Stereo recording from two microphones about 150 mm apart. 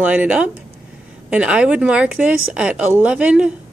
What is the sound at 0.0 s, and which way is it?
Speech, 10° right (ahead or behind).